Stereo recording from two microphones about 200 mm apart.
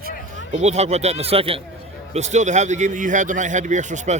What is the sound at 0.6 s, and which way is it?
A man's voice, 35° right (ahead or behind).